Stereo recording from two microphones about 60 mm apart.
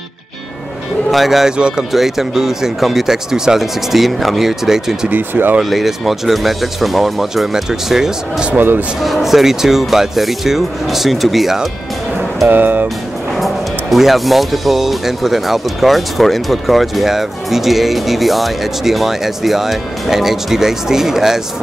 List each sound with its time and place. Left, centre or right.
1.1 s speech: centre
5.1 s speech: right
5.6 s speech: centre
8.5 s speech: right
9.0 s speech: centre
12.4 s speech: right
13.4 s speech: centre